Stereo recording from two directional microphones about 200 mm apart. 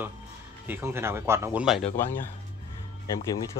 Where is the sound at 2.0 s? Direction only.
10° left (ahead or behind).